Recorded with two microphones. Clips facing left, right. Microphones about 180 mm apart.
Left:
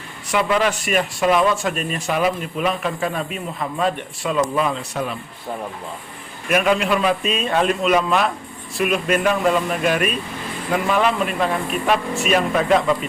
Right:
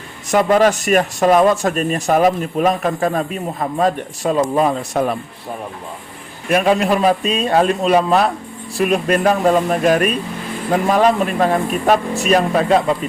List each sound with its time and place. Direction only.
0.3 s speech: 45° right (ahead or behind)
6.5 s speech: 35° right (ahead or behind)